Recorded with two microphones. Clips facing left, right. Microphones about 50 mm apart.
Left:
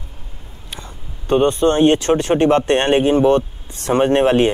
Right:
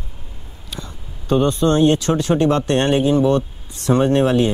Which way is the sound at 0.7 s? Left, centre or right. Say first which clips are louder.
Right 1 dB; left.